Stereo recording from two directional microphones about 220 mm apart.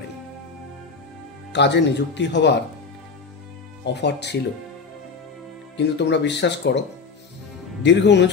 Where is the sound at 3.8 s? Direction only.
50° left (ahead or behind).